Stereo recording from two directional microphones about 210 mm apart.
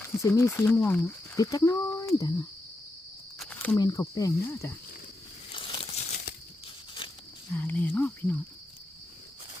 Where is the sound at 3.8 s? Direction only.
15° left (ahead or behind).